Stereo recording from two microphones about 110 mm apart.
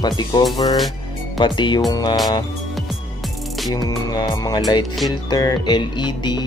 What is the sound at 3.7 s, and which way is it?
Music, 35° left (ahead or behind).